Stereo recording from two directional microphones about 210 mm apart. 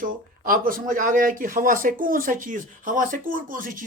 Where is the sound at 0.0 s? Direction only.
40° right (ahead or behind).